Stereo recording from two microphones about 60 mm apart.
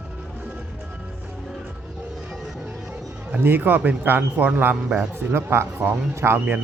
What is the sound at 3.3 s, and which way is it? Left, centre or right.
A man's voice, right.